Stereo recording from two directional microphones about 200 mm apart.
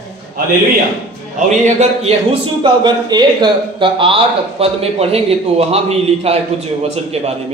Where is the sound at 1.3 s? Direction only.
35° right (ahead or behind).